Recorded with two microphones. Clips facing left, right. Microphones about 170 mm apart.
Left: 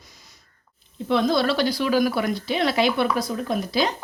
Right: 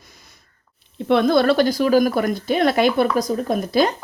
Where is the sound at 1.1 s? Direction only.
60° right (ahead or behind).